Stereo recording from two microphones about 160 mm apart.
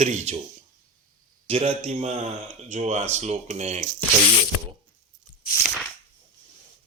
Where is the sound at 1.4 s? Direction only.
40° right (ahead or behind).